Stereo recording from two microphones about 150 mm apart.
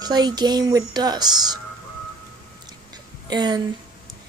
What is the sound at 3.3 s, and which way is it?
Speech, 30° right (ahead or behind).